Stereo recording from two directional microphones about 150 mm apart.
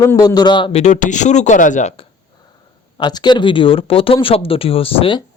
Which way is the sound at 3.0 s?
30° left (ahead or behind).